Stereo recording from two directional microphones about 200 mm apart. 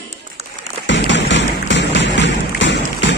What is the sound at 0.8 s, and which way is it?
Music, 65° left (ahead or behind).